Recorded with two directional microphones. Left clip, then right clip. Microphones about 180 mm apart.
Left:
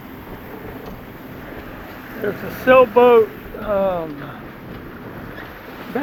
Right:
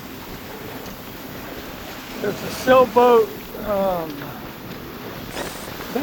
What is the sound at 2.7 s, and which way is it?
Speech, 15° left (ahead or behind).